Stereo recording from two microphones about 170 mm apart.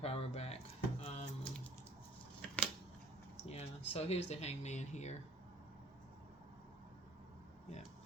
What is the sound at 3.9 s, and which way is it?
Speech, 40° left (ahead or behind).